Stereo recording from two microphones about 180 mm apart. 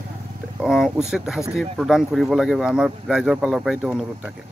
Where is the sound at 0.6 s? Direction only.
5° right (ahead or behind).